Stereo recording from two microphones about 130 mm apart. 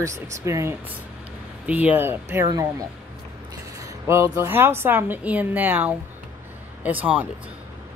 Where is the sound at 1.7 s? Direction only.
10° right (ahead or behind); by 2.7 s 25° right (ahead or behind).